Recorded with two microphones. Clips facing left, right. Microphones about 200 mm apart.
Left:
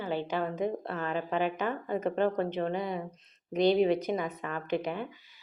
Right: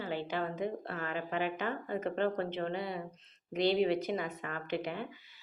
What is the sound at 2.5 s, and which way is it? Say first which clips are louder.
A woman's voice: left 4 dB; 20° left (ahead or behind).